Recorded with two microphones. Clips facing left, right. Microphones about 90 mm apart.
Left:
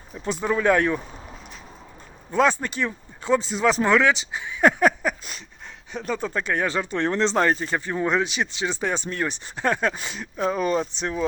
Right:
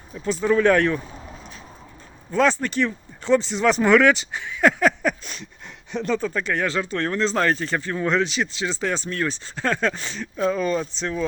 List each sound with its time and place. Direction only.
0.3 s speech: 15° left (ahead or behind)
2.3 s speech: 15° left (ahead or behind); by 4.2 s centre (ahead or behind)
4.4 s speech: 20° left (ahead or behind)
5.0 s a sound: 5° left (ahead or behind)
6.1 s speech: 20° left (ahead or behind)